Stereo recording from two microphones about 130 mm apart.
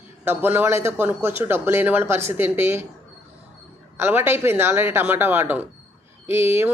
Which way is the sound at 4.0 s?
15° right (ahead or behind).